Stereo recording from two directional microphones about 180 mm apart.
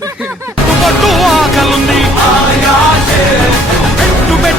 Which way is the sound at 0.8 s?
Centre (ahead or behind).